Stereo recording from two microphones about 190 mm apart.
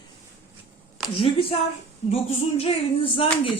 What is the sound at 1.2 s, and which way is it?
Speech, 30° left (ahead or behind).